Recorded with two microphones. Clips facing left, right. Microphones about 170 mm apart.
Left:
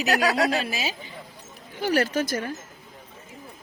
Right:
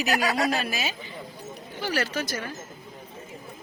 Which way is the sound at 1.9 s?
45° left (ahead or behind).